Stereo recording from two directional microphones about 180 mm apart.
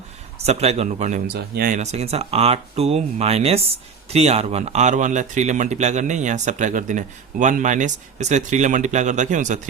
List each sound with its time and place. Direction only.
0.3 s a man's voice: 35° right (ahead or behind)
1.3 s speech: 55° right (ahead or behind)
1.8 s a man's voice: 35° right (ahead or behind)